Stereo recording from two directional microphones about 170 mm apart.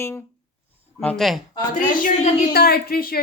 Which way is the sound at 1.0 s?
Centre (ahead or behind).